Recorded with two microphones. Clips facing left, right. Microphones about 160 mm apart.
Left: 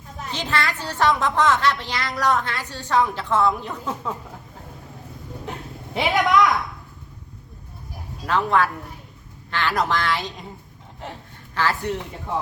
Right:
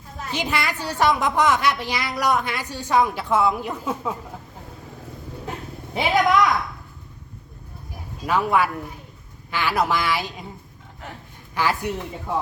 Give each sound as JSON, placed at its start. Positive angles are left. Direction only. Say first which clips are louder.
{"t": 0.3, "sound": "a woman's voice", "louder": "even", "side_deg": -10}
{"t": 5.9, "sound": "a woman's voice", "louder": "even", "side_deg": 0}
{"t": 8.3, "sound": "a woman's voice", "louder": "even", "side_deg": -10}
{"t": 11.0, "sound": "a man's voice", "louder": "left 3 dB", "side_deg": 30}
{"t": 11.5, "sound": "a woman's voice", "louder": "even", "side_deg": -15}